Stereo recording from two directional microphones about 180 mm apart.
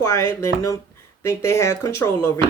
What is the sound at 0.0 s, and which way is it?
Speech, 15° left (ahead or behind).